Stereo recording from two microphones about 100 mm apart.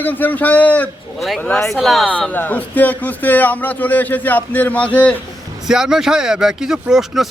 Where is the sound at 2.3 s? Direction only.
15° left (ahead or behind).